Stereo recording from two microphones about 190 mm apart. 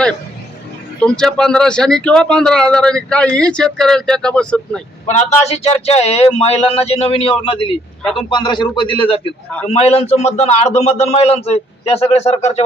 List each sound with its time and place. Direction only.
0.9 s speech: 5° left (ahead or behind)
5.0 s speech: 35° left (ahead or behind)